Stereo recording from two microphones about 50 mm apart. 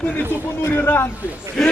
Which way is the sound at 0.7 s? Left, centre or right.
Left.